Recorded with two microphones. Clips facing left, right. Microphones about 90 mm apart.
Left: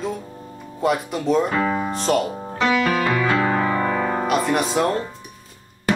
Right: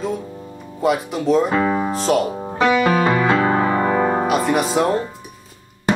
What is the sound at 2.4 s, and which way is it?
Music, 20° right (ahead or behind).